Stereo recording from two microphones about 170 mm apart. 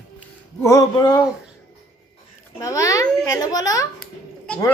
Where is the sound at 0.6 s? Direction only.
20° left (ahead or behind).